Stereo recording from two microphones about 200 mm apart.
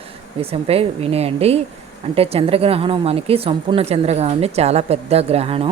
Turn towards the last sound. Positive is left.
turn(degrees=-30)  # may be behind; listen again after turning